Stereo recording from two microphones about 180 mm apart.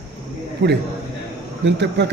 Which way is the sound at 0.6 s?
80° right.